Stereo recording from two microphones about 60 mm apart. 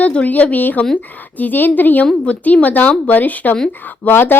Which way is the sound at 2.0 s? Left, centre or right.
Centre.